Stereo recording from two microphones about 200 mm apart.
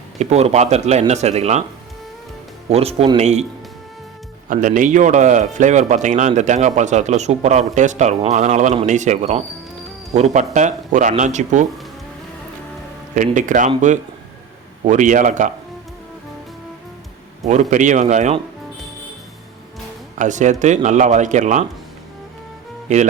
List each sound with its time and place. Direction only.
0.2 s a man's voice: 35° right (ahead or behind)
2.6 s a man's voice: 30° right (ahead or behind)
4.4 s a man's voice: 40° right (ahead or behind)
13.1 s a man's voice: 40° right (ahead or behind)
17.4 s a man's voice: 35° right (ahead or behind)
20.1 s a man's voice: 40° right (ahead or behind)